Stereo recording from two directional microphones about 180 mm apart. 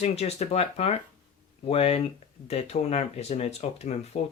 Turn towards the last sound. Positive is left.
turn(degrees=35)  # may be behind; listen again after turning